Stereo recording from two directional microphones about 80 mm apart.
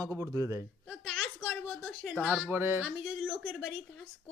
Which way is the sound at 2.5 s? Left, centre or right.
Right.